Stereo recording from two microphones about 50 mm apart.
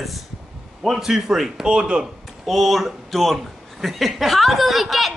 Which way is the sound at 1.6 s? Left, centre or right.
Centre.